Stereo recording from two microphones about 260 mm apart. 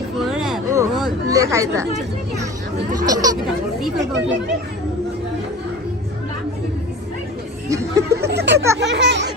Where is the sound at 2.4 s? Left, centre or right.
Centre.